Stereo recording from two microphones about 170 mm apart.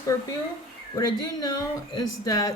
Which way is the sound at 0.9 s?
25° left (ahead or behind).